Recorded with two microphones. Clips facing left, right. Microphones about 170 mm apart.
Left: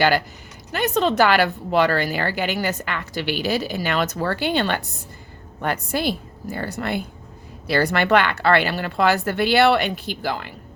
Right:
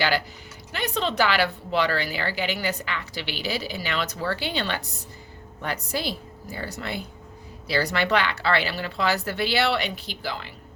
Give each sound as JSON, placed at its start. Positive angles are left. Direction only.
{"t": 0.7, "sound": "a woman's voice", "side_deg": 45}